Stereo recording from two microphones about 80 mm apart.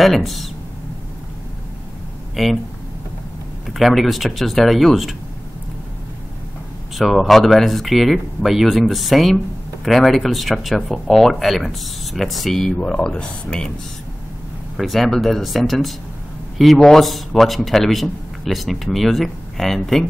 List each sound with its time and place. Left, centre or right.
0.0 s a man's voice: centre
2.3 s speech: centre
3.7 s a man's voice: centre
7.0 s a man's voice: centre
14.8 s a man's voice: centre